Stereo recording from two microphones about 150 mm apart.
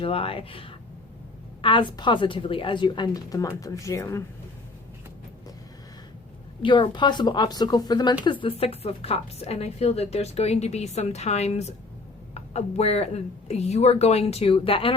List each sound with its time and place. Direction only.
0.0 s a woman's voice: 40° left (ahead or behind); by 4.2 s 20° left (ahead or behind)
6.6 s speech: 30° left (ahead or behind)